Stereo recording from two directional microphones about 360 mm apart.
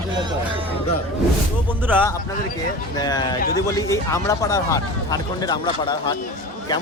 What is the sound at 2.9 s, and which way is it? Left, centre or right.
Speech, centre.